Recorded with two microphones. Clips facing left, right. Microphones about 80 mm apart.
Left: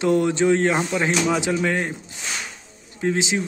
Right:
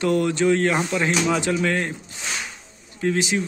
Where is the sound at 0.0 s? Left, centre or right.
Left.